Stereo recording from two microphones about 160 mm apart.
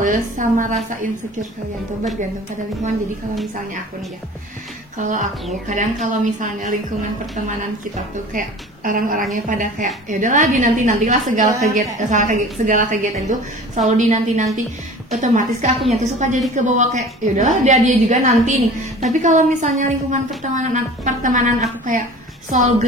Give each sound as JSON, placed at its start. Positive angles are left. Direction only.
{"t": 0.0, "sound": "a woman's voice", "side_deg": -55}
{"t": 4.9, "sound": "a woman's voice", "side_deg": -50}
{"t": 8.3, "sound": "a woman's voice", "side_deg": -60}